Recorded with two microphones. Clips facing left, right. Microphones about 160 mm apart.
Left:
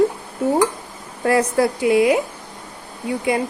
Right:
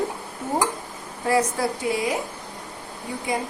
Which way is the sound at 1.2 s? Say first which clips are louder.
Left 5 dB; 65° left (ahead or behind).